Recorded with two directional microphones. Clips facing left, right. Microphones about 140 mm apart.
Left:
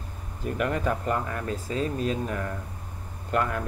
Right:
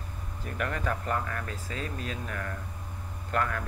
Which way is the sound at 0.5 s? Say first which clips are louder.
Left 6 dB; 20° left (ahead or behind).